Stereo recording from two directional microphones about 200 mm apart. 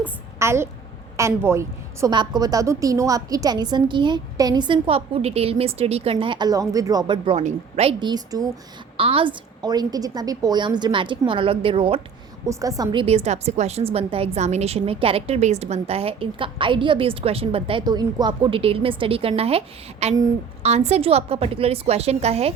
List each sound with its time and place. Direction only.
0.3 s a woman's voice: 15° right (ahead or behind)
12.5 s a woman's voice: 15° right (ahead or behind); by 22.5 s 30° right (ahead or behind)